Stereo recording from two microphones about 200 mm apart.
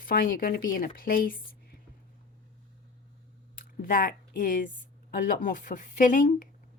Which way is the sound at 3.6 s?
45° left (ahead or behind).